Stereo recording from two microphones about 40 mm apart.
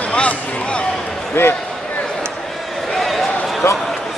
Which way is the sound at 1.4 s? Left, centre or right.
Left.